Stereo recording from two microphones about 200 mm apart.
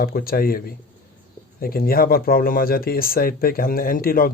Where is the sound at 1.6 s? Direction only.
50° left (ahead or behind).